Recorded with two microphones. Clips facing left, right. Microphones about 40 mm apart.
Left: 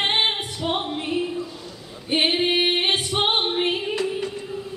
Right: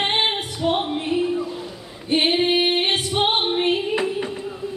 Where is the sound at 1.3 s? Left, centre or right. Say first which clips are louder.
Right 5 dB; centre.